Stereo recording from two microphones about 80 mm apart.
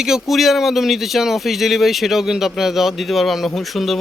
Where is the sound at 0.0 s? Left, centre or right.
Centre.